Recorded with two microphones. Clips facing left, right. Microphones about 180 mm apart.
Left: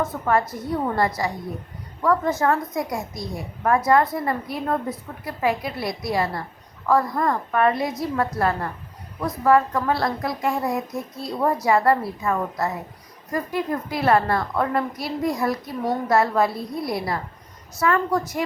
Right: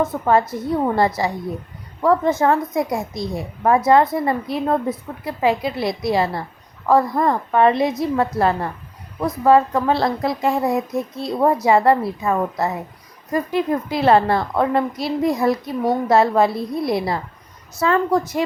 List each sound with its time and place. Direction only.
0.3 s a woman's voice: 25° right (ahead or behind)